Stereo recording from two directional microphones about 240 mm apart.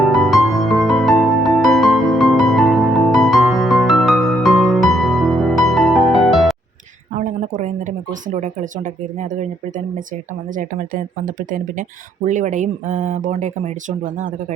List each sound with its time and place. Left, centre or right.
0.0 s music: centre
7.2 s a sound: right
9.3 s speech: right